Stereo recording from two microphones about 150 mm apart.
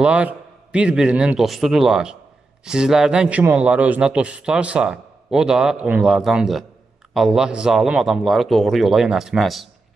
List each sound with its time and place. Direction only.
0.0 s a man's voice: 10° right (ahead or behind)